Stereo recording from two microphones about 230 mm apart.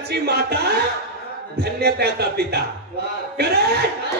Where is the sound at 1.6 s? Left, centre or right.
Right.